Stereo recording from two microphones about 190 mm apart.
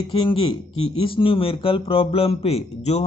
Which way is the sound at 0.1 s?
30° left (ahead or behind).